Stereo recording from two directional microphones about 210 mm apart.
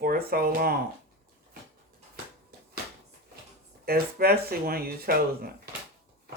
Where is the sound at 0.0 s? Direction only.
45° right (ahead or behind).